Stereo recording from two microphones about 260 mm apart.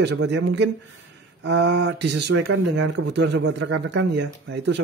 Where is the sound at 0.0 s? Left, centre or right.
Right.